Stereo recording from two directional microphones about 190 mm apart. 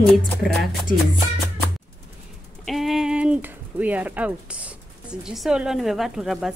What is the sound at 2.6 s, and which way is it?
A woman's voice, centre (ahead or behind).